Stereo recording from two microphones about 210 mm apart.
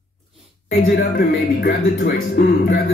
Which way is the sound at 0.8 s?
45° left (ahead or behind).